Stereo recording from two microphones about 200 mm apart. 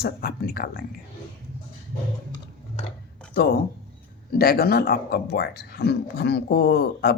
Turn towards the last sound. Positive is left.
turn(degrees=50)  # may be behind; listen again after turning